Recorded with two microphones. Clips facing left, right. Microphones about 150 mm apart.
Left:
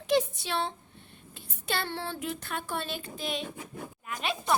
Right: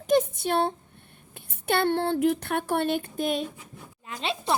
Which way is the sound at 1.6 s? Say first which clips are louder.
Right 9 dB; 55° right (ahead or behind).